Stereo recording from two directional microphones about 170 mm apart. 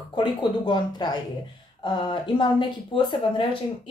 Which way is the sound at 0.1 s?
30° left (ahead or behind).